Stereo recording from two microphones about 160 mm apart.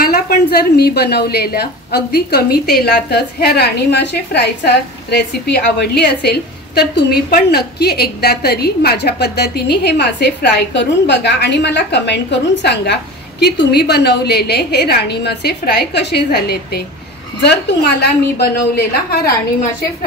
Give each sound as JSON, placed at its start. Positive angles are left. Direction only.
{"t": 0.0, "sound": "a woman's voice", "side_deg": 75}